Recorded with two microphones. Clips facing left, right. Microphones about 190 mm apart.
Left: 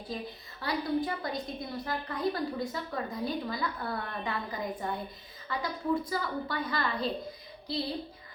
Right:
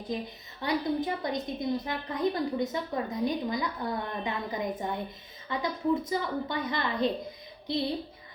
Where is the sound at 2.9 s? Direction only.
20° right (ahead or behind).